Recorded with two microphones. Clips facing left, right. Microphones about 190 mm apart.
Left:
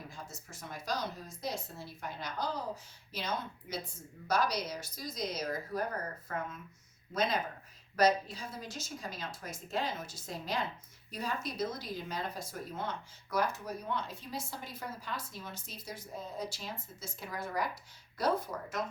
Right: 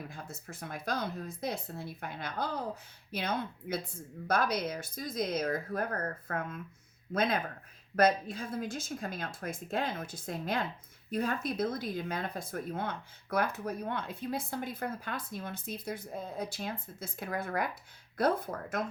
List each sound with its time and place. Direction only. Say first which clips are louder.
0.1 s speech: right 3 dB; 60° right (ahead or behind)